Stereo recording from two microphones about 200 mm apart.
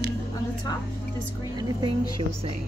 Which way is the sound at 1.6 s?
20° right (ahead or behind).